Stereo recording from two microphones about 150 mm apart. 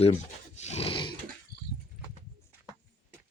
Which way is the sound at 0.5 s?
50° left (ahead or behind).